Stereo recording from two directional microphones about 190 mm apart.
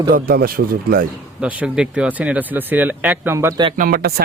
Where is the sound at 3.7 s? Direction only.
50° right (ahead or behind).